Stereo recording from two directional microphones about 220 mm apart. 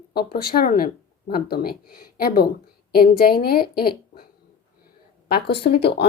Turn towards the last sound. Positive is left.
turn(degrees=50)  # may be behind; listen again after turning